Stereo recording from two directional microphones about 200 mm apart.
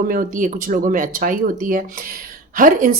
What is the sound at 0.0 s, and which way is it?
Speech, 45° right (ahead or behind).